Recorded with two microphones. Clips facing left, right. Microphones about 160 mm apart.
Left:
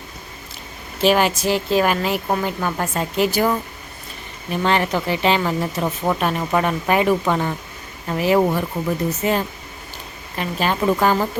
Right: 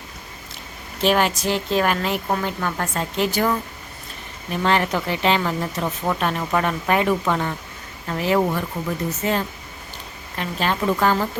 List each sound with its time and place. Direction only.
1.0 s speech: 5° left (ahead or behind)